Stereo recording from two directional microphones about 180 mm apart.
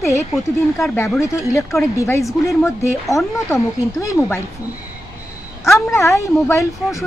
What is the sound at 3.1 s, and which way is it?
A woman's voice, 15° left (ahead or behind).